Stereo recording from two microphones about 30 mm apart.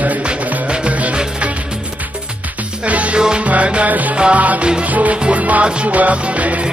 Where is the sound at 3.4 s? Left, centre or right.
Right.